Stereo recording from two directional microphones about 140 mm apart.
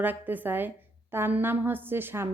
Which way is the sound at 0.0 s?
15° right (ahead or behind).